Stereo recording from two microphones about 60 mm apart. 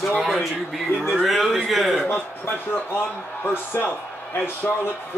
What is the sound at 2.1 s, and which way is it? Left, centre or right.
A man's voice, left.